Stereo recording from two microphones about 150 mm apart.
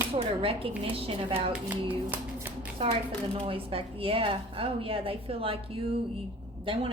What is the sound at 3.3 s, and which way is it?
Speech, 40° right (ahead or behind).